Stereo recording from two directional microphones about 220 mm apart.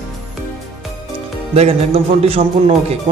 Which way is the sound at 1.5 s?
25° right (ahead or behind).